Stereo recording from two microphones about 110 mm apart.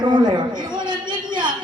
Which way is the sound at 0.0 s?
45° right (ahead or behind).